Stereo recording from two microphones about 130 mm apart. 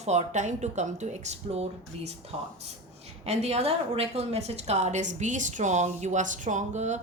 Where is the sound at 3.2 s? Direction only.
55° right (ahead or behind).